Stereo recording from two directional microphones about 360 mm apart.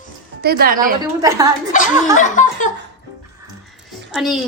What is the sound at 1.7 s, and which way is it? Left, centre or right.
Speech, left.